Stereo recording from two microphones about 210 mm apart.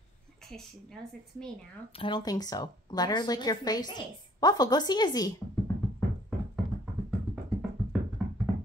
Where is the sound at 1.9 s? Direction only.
25° left (ahead or behind).